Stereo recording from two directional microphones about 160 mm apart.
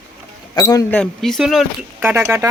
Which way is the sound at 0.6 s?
20° left (ahead or behind).